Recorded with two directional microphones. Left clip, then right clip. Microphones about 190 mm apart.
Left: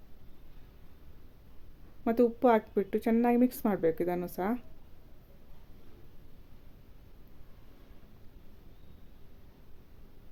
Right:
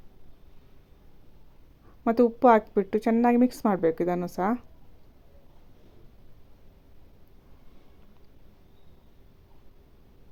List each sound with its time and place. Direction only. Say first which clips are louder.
2.0 s speech: right 6 dB; 15° right (ahead or behind)